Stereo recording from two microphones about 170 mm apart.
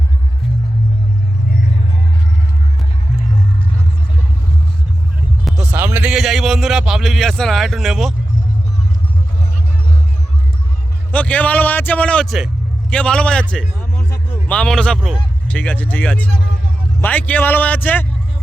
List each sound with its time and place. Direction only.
5.5 s music: 5° right (ahead or behind)
5.8 s a man's voice: 10° right (ahead or behind)
11.1 s a man's voice: 10° left (ahead or behind)
13.5 s a sound: 5° left (ahead or behind)
14.1 s a man's voice: 10° left (ahead or behind)